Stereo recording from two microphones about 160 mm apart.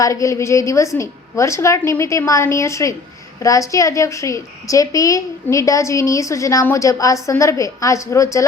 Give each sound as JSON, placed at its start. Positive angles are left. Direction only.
{"t": 0.0, "sound": "a woman's voice", "side_deg": 20}